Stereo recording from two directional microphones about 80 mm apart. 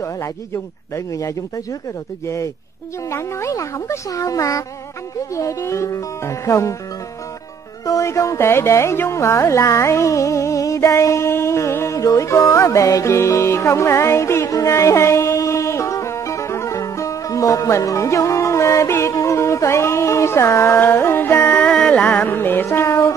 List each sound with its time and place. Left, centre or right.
0.9 s speech: left
7.8 s music: left
21.6 s music: centre; by 23.1 s left